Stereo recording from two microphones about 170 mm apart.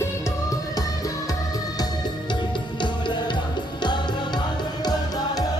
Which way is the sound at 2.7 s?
30° left (ahead or behind).